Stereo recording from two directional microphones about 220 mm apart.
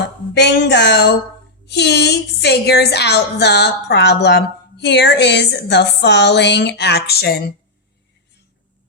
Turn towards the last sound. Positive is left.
turn(degrees=45)  # may be behind; listen again after turning